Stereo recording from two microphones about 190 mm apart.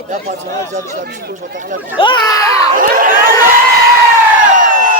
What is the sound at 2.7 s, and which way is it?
Speech, 45° right (ahead or behind).